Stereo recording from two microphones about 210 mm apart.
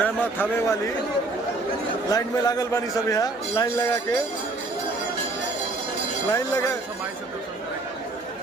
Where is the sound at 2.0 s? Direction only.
15° left (ahead or behind).